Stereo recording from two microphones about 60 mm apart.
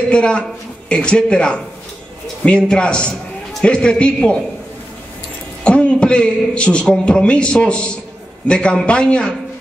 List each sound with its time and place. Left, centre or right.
0.1 s a man's voice: centre
5.6 s a man's voice: centre